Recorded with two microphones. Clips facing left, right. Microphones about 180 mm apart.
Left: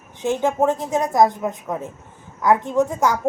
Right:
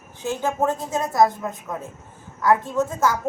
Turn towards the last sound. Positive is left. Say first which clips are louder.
# left 3 dB
turn(degrees=15)  # may be behind; listen again after turning